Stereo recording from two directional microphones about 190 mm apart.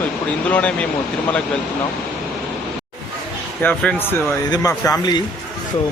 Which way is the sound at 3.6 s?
10° left (ahead or behind).